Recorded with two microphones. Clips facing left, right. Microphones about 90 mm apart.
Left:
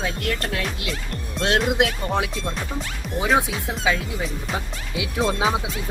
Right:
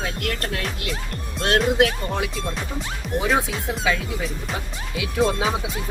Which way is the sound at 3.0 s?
Centre (ahead or behind).